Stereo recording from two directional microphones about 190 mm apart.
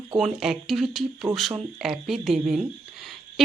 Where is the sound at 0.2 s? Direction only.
Centre (ahead or behind).